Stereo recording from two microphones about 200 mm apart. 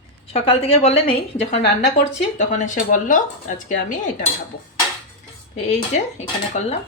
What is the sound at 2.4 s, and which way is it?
Dishes, 40° left (ahead or behind).